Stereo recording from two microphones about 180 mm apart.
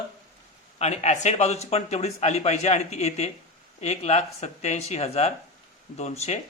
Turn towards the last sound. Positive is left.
turn(degrees=40)  # may be behind; listen again after turning